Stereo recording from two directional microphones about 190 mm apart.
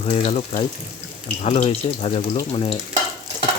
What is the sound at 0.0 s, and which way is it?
Speech, 30° left (ahead or behind).